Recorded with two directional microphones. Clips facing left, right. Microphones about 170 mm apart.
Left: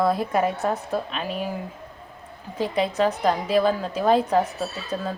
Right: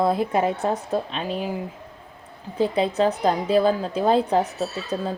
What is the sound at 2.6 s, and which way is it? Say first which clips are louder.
Speech: right 2 dB; 30° right (ahead or behind).